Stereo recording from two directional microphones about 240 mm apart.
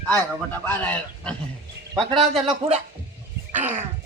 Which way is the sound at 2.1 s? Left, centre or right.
Right.